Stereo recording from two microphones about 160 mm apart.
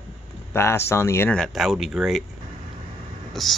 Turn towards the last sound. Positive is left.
turn(degrees=0)  # may be behind; listen again after turning